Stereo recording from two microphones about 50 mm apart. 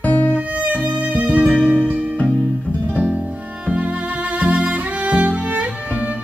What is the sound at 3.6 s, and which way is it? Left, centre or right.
Music, right.